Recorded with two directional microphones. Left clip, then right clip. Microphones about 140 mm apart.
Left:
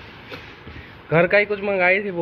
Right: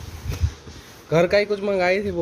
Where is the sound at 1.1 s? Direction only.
35° right (ahead or behind).